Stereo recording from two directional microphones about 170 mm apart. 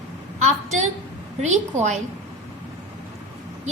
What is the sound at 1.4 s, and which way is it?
Speech, 40° right (ahead or behind).